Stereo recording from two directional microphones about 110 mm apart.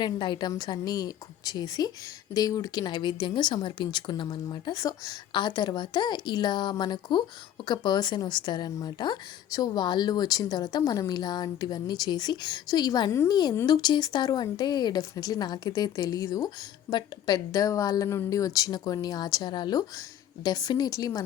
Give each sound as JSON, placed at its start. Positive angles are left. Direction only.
{"t": 0.0, "sound": "speech", "side_deg": 45}